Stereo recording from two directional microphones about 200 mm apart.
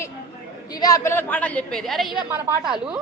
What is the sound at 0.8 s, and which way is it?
Speech, 15° left (ahead or behind).